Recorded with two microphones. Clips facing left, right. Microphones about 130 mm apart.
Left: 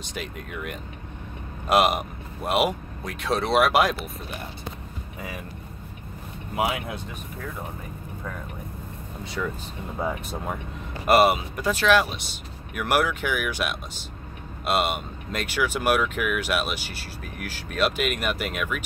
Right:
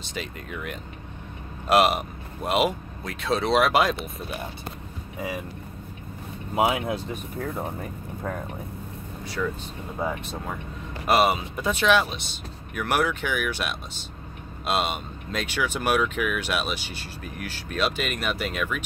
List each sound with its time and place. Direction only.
0.0 s speech: 10° left (ahead or behind)
6.5 s speech: 25° right (ahead or behind)
11.1 s speech: centre (ahead or behind)